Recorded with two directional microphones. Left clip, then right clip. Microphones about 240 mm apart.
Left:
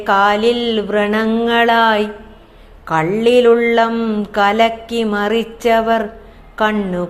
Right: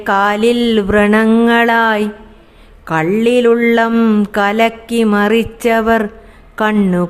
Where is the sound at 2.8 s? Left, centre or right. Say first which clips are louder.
Even; right.